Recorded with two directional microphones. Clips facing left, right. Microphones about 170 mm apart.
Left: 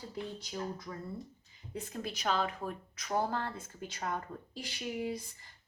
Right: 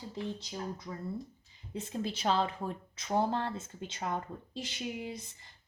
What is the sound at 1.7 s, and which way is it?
A woman's voice, 25° right (ahead or behind).